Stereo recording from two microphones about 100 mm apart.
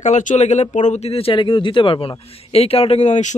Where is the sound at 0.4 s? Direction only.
90° left.